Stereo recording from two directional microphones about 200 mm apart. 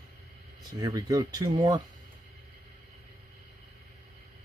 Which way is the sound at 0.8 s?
20° right (ahead or behind).